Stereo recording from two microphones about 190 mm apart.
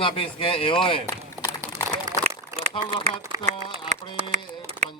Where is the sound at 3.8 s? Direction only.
35° right (ahead or behind).